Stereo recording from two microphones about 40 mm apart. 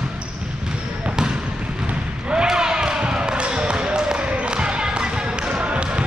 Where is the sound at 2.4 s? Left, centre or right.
Centre.